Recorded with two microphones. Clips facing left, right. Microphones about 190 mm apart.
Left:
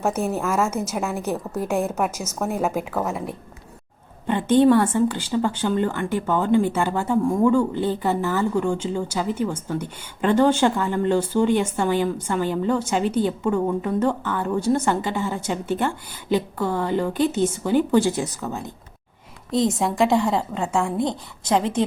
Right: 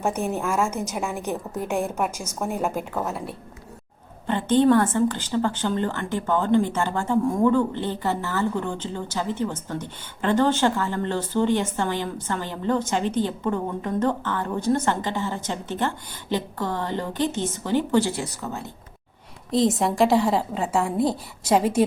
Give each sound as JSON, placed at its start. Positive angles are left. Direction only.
{"t": 0.0, "sound": "a woman's voice", "side_deg": 5}
{"t": 4.3, "sound": "a woman's voice", "side_deg": 15}
{"t": 19.5, "sound": "a woman's voice", "side_deg": 0}